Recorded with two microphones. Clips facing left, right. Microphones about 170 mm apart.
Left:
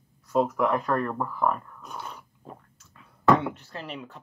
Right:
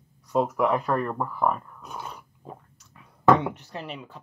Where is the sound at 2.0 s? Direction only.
10° right (ahead or behind).